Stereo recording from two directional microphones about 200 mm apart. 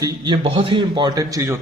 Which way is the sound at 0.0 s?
25° right (ahead or behind).